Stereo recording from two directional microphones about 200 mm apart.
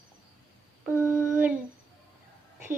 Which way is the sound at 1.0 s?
15° left (ahead or behind).